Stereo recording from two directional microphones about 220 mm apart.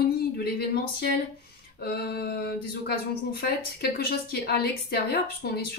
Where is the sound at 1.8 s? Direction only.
45° left (ahead or behind).